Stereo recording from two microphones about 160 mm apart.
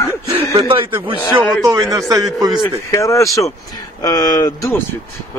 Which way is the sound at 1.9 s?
20° right (ahead or behind).